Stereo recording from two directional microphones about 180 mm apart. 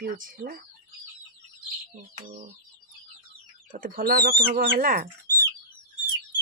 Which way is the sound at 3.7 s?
50° right (ahead or behind).